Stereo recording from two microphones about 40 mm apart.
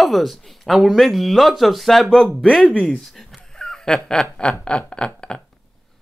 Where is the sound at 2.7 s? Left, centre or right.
Left.